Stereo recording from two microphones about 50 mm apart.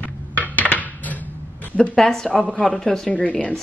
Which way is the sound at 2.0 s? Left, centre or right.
Centre.